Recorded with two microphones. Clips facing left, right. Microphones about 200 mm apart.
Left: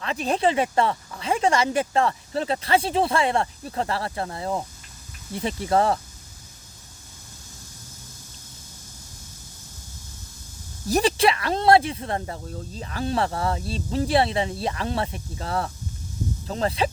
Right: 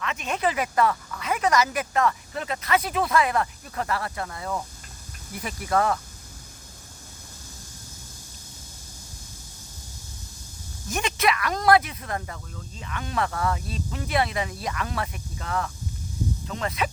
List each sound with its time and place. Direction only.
0.0 s speech: 35° left (ahead or behind)
10.8 s speech: 35° left (ahead or behind)